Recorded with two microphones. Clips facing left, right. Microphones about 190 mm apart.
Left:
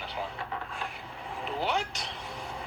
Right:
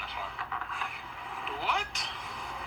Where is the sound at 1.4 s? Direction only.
25° left (ahead or behind).